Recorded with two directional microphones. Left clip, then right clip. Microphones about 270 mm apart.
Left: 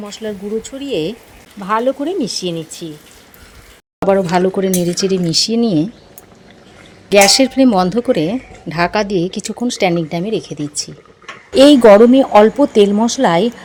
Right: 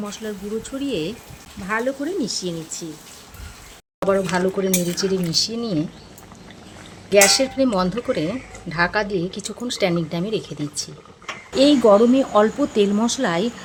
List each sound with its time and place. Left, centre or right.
0.1 s speech: centre
4.3 s speech: left
7.1 s speech: left